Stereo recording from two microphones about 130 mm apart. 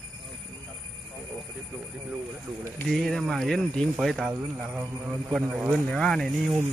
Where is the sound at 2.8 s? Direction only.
Centre (ahead or behind).